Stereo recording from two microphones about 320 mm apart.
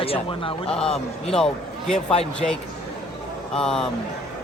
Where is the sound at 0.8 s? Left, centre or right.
Centre.